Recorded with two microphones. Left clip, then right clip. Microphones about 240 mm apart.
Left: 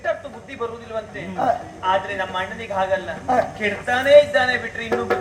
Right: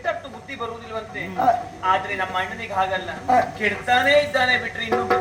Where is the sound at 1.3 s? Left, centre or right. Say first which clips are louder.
Right 2 dB; left.